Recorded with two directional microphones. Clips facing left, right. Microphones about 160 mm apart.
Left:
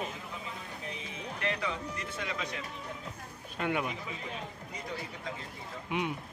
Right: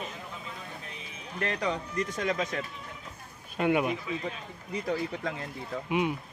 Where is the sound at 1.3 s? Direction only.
40° right (ahead or behind).